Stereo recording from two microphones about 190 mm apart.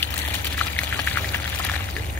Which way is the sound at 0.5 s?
10° left (ahead or behind).